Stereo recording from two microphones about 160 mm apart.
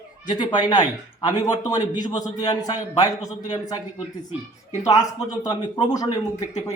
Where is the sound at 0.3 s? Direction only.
25° left (ahead or behind).